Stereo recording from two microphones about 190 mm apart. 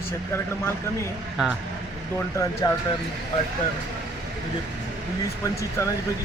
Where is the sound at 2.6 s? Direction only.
20° left (ahead or behind).